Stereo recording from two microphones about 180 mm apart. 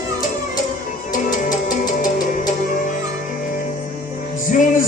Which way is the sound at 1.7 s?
50° left (ahead or behind).